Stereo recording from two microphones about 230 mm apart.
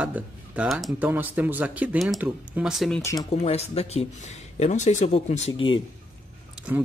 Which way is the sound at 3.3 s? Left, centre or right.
Left.